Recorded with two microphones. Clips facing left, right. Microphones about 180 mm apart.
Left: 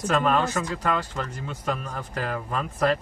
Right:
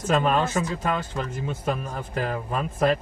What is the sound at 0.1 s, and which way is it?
Speech, 15° right (ahead or behind).